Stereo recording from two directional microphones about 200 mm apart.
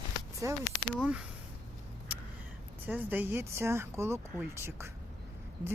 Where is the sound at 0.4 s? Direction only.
15° right (ahead or behind).